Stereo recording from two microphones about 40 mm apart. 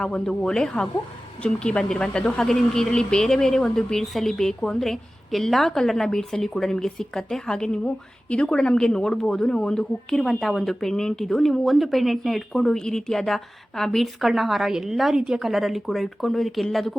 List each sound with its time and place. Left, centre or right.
0.0 s a woman's voice: centre
10.2 s a woman's voice: centre
13.9 s a woman's voice: centre
15.1 s a woman's voice: centre
15.4 s speech: centre